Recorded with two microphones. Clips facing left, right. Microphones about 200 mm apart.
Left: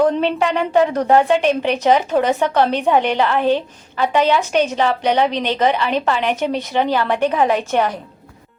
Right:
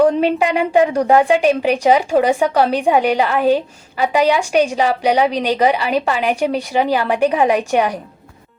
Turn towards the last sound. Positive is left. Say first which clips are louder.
# right 2 dB
turn(degrees=-15)  # may be behind; listen again after turning